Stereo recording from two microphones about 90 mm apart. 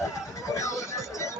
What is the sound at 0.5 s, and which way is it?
Music, 35° left (ahead or behind).